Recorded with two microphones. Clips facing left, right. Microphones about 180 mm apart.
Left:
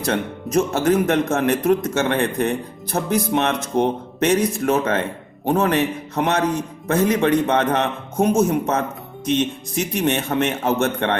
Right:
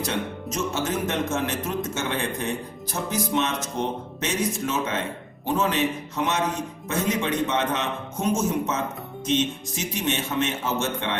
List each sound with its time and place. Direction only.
0.0 s a man's voice: 60° left (ahead or behind)